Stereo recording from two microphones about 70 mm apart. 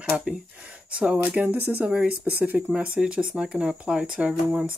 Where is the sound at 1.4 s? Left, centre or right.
Right.